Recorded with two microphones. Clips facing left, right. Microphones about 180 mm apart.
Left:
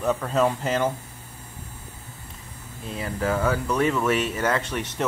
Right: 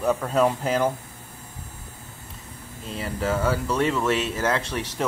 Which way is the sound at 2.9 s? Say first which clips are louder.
Even; 5° right (ahead or behind).